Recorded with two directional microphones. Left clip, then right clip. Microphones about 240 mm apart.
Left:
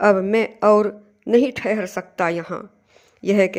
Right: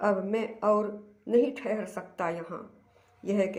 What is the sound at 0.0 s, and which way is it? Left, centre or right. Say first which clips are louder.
Speech: left 12 dB; left.